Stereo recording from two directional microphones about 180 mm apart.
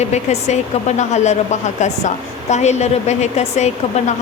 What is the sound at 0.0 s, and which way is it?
A woman's voice, 40° left (ahead or behind).